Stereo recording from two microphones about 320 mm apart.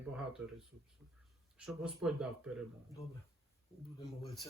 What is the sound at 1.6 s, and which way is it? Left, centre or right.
Speech, centre.